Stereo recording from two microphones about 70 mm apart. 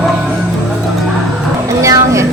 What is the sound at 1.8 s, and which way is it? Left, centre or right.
Speech, right.